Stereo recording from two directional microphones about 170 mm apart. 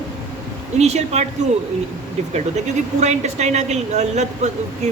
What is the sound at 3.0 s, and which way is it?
Speech, 40° right (ahead or behind).